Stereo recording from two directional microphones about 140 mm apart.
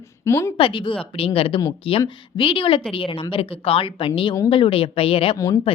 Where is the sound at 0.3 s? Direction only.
20° left (ahead or behind).